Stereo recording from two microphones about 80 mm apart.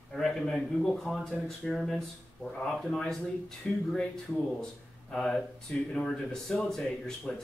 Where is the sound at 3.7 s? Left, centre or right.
Centre.